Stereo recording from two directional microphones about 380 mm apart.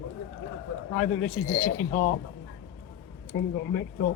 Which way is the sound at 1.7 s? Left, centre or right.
Left.